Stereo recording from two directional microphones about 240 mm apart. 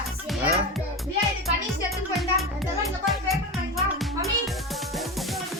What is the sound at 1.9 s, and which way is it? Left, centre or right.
Music, centre.